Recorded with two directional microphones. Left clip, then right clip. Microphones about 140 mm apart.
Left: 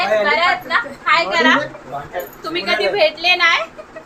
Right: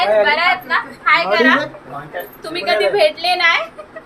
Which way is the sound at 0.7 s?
15° left (ahead or behind).